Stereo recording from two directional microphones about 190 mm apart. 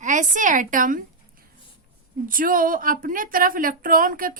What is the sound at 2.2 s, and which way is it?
Speech, 45° right (ahead or behind).